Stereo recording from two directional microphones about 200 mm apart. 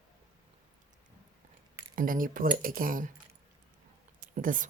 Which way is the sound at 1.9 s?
45° right (ahead or behind).